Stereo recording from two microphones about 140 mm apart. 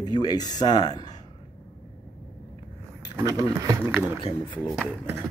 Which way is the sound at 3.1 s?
25° right (ahead or behind).